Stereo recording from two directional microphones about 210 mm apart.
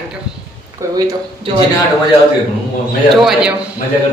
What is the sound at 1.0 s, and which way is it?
Speech, 15° right (ahead or behind).